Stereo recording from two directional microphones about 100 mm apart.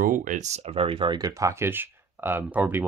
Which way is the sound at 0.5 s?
90° right.